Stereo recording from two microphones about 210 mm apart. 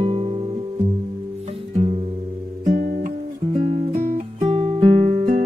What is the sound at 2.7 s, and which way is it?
Guitar, 40° right (ahead or behind).